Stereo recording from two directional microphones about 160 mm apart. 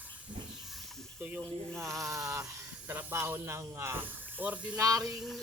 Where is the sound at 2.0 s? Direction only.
20° right (ahead or behind).